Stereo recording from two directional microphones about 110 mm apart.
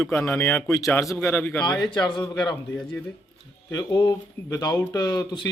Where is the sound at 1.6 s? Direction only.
40° left (ahead or behind).